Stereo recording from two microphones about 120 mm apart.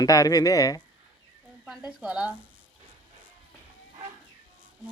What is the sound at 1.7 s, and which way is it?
Speech, 10° right (ahead or behind).